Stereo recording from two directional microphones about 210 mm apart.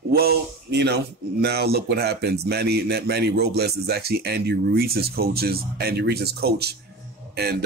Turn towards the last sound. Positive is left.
turn(degrees=-50)  # may be behind; listen again after turning